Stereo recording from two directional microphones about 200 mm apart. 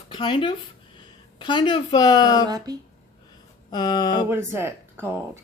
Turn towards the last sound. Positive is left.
turn(degrees=-10)  # may be behind; listen again after turning